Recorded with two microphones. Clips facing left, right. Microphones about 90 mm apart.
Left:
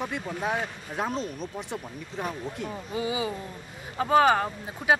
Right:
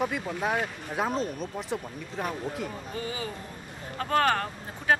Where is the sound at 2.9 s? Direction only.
10° left (ahead or behind).